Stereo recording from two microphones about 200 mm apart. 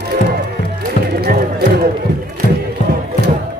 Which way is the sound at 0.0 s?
55° right (ahead or behind).